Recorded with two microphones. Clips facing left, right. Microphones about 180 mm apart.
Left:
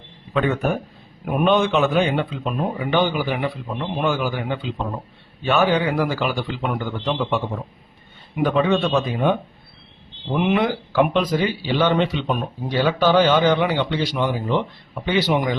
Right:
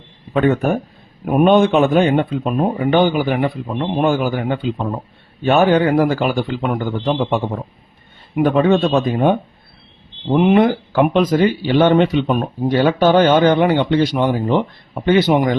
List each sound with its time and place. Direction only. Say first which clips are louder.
0.3 s speech: right 5 dB; 50° right (ahead or behind)
10.3 s speech: right 7 dB; 45° right (ahead or behind)